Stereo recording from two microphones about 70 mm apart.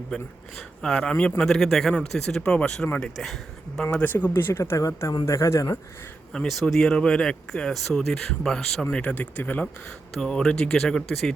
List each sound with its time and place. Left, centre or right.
0.8 s speech: centre
4.0 s speech: left
4.8 s speech: left
6.5 s speech: centre; by 9.6 s left
10.2 s speech: centre